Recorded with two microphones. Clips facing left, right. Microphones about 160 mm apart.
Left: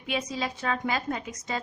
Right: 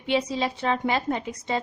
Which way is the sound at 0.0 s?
30° right (ahead or behind).